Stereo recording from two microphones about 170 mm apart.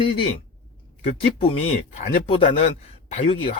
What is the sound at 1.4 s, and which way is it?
A man's voice, 35° left (ahead or behind).